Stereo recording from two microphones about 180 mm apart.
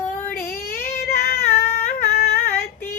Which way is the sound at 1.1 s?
60° left (ahead or behind).